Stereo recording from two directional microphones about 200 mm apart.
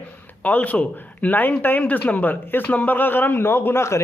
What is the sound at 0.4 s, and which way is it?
A man's voice, 10° left (ahead or behind).